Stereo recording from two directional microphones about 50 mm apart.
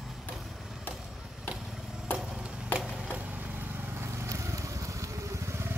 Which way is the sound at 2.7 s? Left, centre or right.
Right.